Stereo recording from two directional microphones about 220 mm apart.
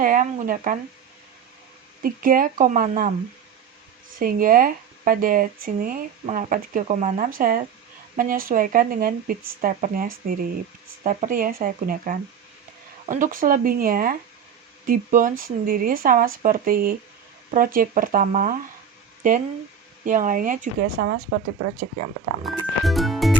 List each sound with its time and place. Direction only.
0.0 s speech: 40° right (ahead or behind)
2.0 s speech: 40° right (ahead or behind)
4.2 s speech: 40° right (ahead or behind)
21.0 s a woman's voice: 50° right (ahead or behind)
21.6 s speech: 35° right (ahead or behind)
22.4 s music: centre (ahead or behind)